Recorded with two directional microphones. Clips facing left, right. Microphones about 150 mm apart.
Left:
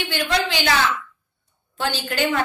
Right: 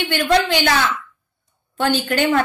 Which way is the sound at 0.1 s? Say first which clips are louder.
Right 6 dB; 50° right (ahead or behind).